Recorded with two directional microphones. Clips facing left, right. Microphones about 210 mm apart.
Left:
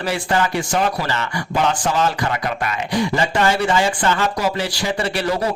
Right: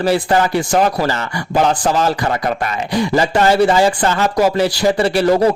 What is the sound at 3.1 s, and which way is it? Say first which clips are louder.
Speech: right 7 dB; 40° right (ahead or behind).